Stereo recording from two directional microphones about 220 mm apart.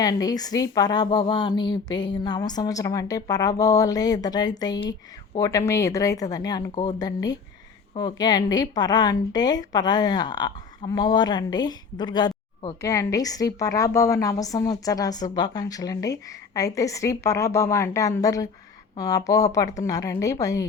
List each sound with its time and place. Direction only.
0.0 s speech: 15° left (ahead or behind)